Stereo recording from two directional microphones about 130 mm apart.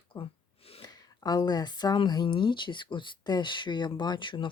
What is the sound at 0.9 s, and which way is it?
Speech, 30° left (ahead or behind).